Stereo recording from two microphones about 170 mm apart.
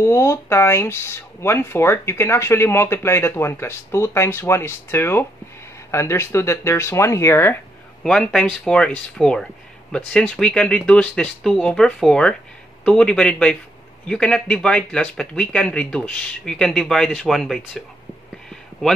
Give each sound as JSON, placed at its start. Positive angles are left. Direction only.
{"t": 0.0, "sound": "speech", "side_deg": 15}
{"t": 8.0, "sound": "speech", "side_deg": 5}